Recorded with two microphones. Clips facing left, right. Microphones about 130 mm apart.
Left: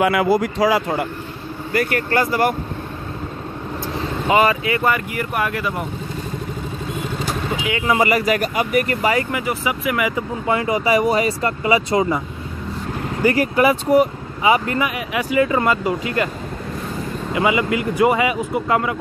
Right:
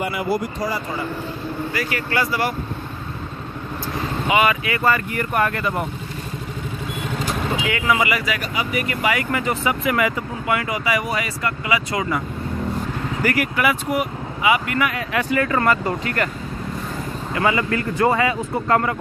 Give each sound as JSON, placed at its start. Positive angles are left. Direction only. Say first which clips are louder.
{"t": 0.0, "sound": "speech", "louder": "left 6 dB", "side_deg": 90}
{"t": 1.7, "sound": "speech", "louder": "left 9 dB", "side_deg": 55}
{"t": 4.3, "sound": "speech", "louder": "left 3 dB", "side_deg": 40}
{"t": 4.6, "sound": "speech", "louder": "left 1 dB", "side_deg": 20}
{"t": 7.6, "sound": "speech", "louder": "left 2 dB", "side_deg": 25}
{"t": 8.0, "sound": "speech", "louder": "left 5 dB", "side_deg": 40}
{"t": 9.3, "sound": "speech", "louder": "right 1 dB", "side_deg": 10}
{"t": 10.4, "sound": "speech", "louder": "left 4 dB", "side_deg": 25}
{"t": 13.2, "sound": "speech", "louder": "left 5 dB", "side_deg": 30}
{"t": 14.9, "sound": "speech", "louder": "even", "side_deg": 15}
{"t": 17.3, "sound": "speech", "louder": "left 2 dB", "side_deg": 15}